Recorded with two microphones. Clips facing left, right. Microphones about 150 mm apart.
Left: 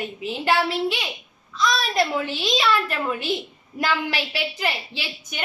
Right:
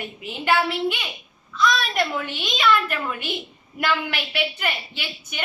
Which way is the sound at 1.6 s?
35° left (ahead or behind).